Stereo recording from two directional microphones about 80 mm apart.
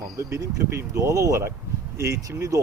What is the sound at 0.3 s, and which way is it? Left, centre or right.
Speech, right.